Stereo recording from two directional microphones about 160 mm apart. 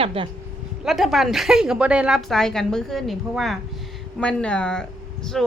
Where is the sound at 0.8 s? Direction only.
Centre (ahead or behind).